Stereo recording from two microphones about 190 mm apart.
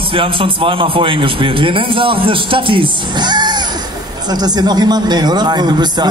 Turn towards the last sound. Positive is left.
turn(degrees=-20)  # may be behind; listen again after turning